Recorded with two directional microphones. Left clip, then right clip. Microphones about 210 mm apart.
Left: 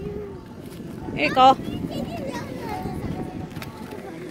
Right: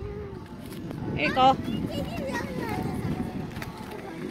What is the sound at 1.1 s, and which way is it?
Speech, 35° left (ahead or behind).